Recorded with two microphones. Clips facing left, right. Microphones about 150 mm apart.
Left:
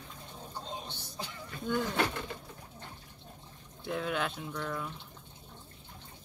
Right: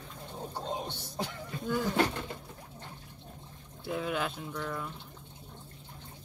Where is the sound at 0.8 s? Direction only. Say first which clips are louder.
Right 6 dB; 55° right (ahead or behind).